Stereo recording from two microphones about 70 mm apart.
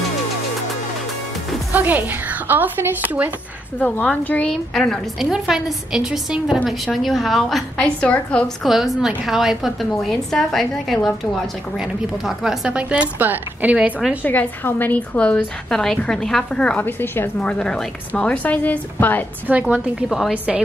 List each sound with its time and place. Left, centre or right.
1.7 s speech: right
4.0 s a woman's voice: left
4.5 s a woman's voice: centre
5.2 s a woman's voice: centre
6.9 s a woman's voice: centre
7.7 s a woman's voice: centre
8.6 s a woman's voice: centre
11.8 s a woman's voice: centre
14.2 s a woman's voice: left; by 16.7 s centre
16.7 s a woman's voice: left
17.4 s a woman's voice: centre
19.5 s speech: centre
20.1 s a woman's voice: centre